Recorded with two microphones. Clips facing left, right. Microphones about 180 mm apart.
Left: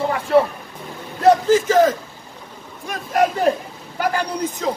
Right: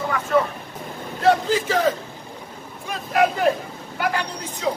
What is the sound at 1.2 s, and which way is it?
Speech, 45° left (ahead or behind).